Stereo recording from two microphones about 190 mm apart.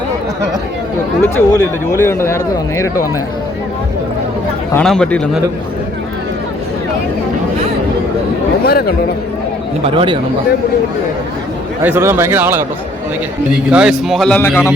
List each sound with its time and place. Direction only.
1.2 s speech: 15° left (ahead or behind)
4.7 s a man's voice: 5° left (ahead or behind)
8.6 s speech: 55° left (ahead or behind)
9.8 s speech: 25° right (ahead or behind)
11.8 s a man's voice: 10° right (ahead or behind)
13.7 s a man's voice: 5° right (ahead or behind)